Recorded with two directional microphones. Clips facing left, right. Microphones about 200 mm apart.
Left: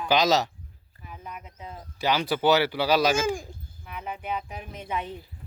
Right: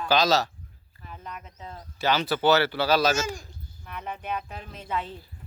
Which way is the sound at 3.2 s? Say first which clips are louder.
Left 7 dB; 50° left (ahead or behind).